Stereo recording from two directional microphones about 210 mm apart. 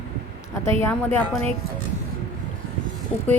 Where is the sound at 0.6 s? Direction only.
10° left (ahead or behind).